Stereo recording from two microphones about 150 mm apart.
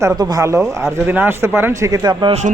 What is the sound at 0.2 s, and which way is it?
A man's voice, 25° right (ahead or behind).